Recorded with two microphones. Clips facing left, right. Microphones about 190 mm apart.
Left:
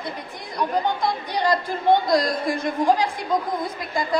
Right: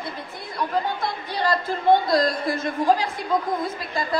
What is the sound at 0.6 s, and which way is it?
A woman's voice, 15° left (ahead or behind).